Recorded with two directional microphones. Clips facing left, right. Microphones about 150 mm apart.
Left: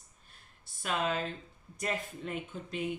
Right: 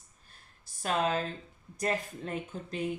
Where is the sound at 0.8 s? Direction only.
40° right (ahead or behind).